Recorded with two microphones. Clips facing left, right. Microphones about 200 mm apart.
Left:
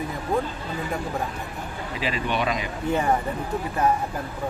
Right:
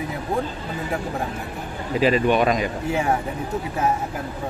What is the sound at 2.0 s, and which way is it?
Speech, 50° right (ahead or behind).